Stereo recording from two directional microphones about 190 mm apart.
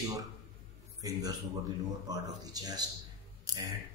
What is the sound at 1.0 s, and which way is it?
A man's voice, 20° right (ahead or behind).